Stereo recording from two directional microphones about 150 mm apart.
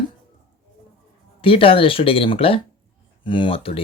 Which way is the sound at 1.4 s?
35° left (ahead or behind).